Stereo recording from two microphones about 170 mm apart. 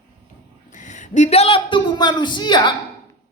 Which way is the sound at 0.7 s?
45° left (ahead or behind).